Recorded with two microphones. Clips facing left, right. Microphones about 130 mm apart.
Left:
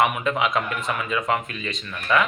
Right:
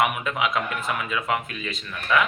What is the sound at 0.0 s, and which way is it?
A man's voice, 5° right (ahead or behind).